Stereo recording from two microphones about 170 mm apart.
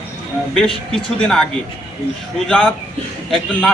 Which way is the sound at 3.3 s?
Centre (ahead or behind).